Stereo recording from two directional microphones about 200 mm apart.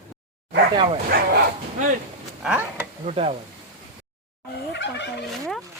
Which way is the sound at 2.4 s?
5° right (ahead or behind).